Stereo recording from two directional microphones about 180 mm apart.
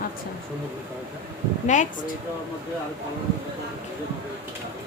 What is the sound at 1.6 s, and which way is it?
Speech, 45° left (ahead or behind).